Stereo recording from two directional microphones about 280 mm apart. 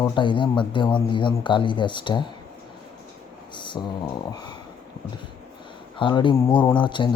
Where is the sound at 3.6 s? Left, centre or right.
Centre.